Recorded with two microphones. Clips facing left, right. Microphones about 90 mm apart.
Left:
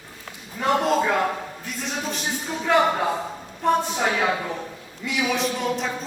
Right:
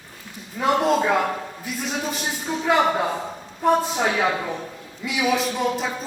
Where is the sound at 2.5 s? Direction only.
10° right (ahead or behind).